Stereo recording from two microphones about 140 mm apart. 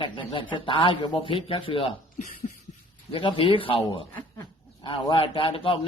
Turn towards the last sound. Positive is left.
turn(degrees=40)  # may be behind; listen again after turning